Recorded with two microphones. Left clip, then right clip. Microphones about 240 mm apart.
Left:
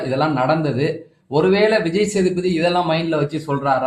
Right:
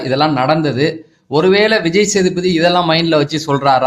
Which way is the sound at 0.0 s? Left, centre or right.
Right.